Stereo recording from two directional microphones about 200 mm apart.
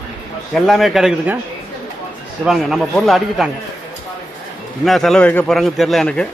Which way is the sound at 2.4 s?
Centre (ahead or behind).